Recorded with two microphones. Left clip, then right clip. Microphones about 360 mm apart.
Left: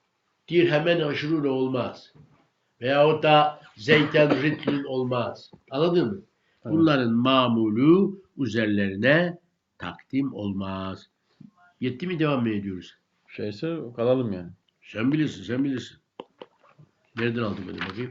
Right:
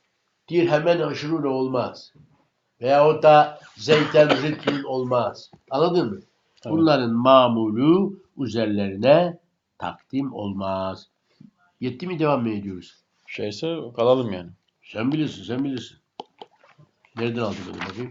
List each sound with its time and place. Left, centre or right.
0.4 s speech: centre
14.8 s speech: centre
17.2 s speech: centre